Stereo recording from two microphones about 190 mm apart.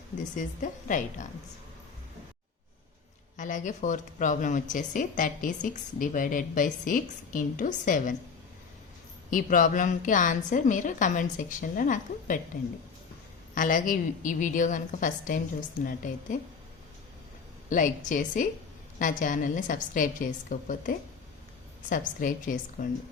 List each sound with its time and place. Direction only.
0.3 s a woman's voice: 40° left (ahead or behind)
3.3 s a woman's voice: 40° left (ahead or behind)
9.3 s a woman's voice: 45° left (ahead or behind)
13.5 s a woman's voice: 45° left (ahead or behind)
17.7 s a woman's voice: 40° left (ahead or behind)